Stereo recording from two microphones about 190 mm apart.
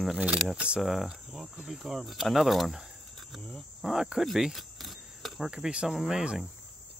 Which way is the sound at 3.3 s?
5° left (ahead or behind).